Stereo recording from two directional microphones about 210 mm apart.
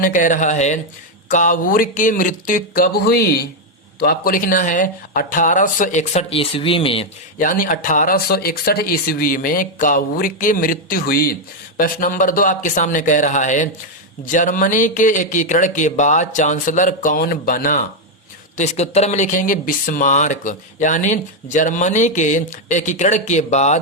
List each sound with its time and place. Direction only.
0.0 s speech: 40° left (ahead or behind)
7.3 s speech: 40° left (ahead or behind)